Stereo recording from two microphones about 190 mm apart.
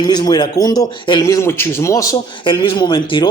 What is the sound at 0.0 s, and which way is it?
A man's voice, 20° left (ahead or behind).